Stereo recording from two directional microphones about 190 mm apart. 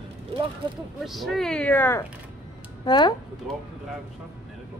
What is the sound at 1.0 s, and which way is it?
Speech, centre (ahead or behind).